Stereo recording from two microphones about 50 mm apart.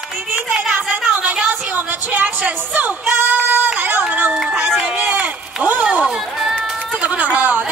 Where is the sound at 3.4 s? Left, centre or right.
Right.